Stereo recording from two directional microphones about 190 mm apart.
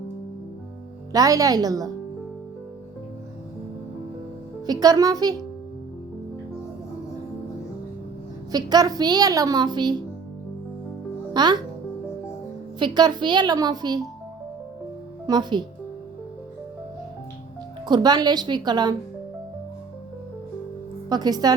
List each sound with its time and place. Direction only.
1.1 s a woman's voice: 20° right (ahead or behind)
4.6 s a woman's voice: 20° right (ahead or behind)
8.5 s a woman's voice: 20° right (ahead or behind)
11.3 s a woman's voice: 20° right (ahead or behind)
12.8 s a woman's voice: 20° right (ahead or behind)
15.3 s a woman's voice: 25° right (ahead or behind)
17.8 s a woman's voice: 20° right (ahead or behind)
21.1 s a woman's voice: 20° right (ahead or behind)